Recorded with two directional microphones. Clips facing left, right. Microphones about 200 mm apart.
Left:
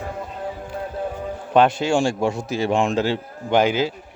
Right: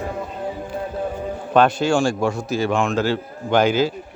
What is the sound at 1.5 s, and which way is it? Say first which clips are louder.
Speech: even; 20° left (ahead or behind).